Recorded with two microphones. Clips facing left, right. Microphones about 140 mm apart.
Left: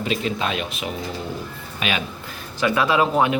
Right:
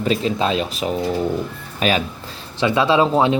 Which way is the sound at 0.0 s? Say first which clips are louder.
Right 5 dB; 35° right (ahead or behind).